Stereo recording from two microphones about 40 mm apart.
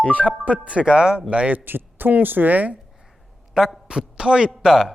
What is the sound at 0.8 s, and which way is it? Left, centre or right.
Speech, right.